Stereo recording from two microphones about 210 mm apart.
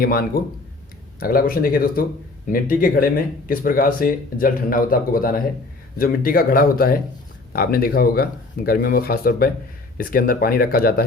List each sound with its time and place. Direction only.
0.0 s speech: 45° left (ahead or behind)